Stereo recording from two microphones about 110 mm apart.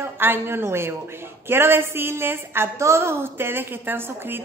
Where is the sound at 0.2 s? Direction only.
20° right (ahead or behind).